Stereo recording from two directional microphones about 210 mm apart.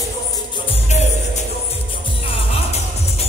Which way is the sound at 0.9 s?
35° left (ahead or behind).